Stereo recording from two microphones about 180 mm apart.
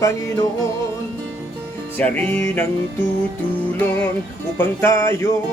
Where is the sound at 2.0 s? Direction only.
10° left (ahead or behind).